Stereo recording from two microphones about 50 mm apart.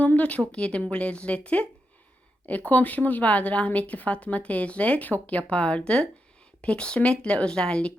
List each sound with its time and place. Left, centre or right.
0.2 s a woman's voice: left
2.6 s a woman's voice: left